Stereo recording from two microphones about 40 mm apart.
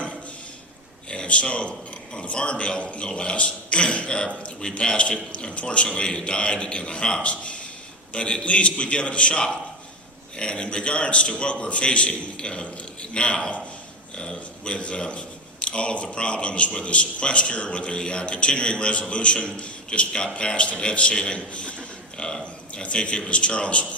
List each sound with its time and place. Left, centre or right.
1.1 s speech: left